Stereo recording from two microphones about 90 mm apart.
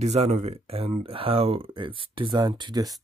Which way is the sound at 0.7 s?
90° right.